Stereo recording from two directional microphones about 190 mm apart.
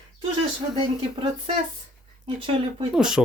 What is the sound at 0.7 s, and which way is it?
Speech, 30° right (ahead or behind).